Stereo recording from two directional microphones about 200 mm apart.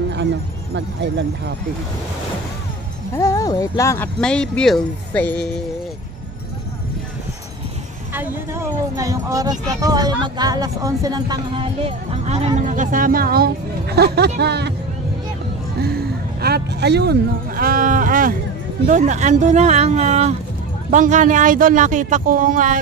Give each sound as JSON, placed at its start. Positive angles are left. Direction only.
{"t": 0.7, "sound": "speech", "side_deg": -60}
{"t": 3.2, "sound": "speech", "side_deg": 15}
{"t": 4.2, "sound": "speech", "side_deg": 5}
{"t": 8.1, "sound": "speech", "side_deg": -10}
{"t": 15.8, "sound": "speech", "side_deg": -50}